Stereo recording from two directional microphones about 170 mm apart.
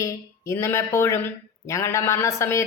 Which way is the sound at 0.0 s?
15° left (ahead or behind).